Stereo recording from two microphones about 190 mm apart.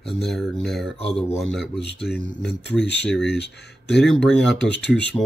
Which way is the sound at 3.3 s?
60° left (ahead or behind).